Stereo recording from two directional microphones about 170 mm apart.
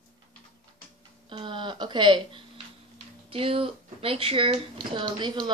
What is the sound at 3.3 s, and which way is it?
A woman's voice, 30° right (ahead or behind).